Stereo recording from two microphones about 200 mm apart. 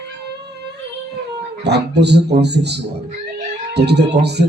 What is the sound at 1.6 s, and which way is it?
Speech, 55° right (ahead or behind).